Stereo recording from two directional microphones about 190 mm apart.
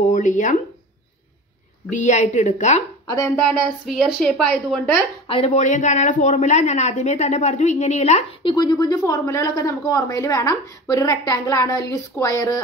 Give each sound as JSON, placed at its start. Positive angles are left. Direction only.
{"t": 0.0, "sound": "speech", "side_deg": 40}
{"t": 1.9, "sound": "a woman's voice", "side_deg": 40}
{"t": 3.1, "sound": "speech", "side_deg": 15}
{"t": 3.4, "sound": "a woman's voice", "side_deg": 0}
{"t": 5.3, "sound": "speech", "side_deg": 35}